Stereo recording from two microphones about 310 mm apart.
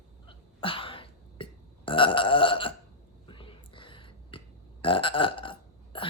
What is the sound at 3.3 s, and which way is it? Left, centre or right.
Whispering, centre.